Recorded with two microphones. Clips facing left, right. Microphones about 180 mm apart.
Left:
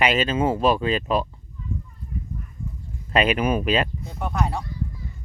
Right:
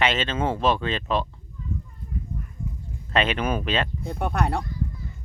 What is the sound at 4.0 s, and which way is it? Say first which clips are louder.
Speech: right 1 dB; 60° right (ahead or behind).